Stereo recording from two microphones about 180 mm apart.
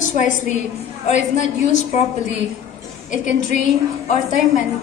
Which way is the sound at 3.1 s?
45° left (ahead or behind).